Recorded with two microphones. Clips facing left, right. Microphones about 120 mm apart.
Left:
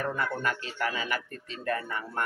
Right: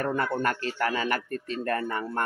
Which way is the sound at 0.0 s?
50° right (ahead or behind).